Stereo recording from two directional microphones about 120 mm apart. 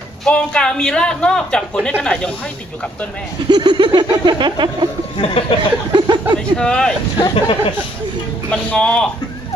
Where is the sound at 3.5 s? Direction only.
40° right (ahead or behind).